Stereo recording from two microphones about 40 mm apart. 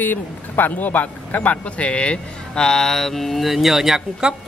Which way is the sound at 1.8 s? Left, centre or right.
Left.